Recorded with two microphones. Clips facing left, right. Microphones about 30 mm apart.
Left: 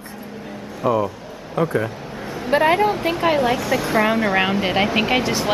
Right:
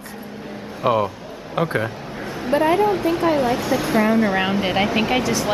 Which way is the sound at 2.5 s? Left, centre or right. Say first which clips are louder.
Left 1 dB; left.